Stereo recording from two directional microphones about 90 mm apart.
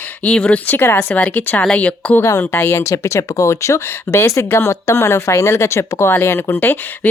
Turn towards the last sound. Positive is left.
turn(degrees=25)  # may be behind; listen again after turning